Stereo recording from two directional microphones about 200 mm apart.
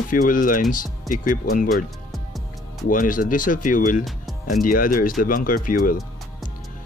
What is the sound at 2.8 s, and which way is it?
Speech, 40° left (ahead or behind).